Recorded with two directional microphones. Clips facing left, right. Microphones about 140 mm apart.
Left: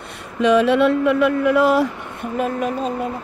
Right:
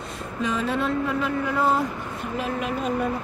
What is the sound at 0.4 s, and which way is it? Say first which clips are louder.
Speech: left 11 dB; 80° left.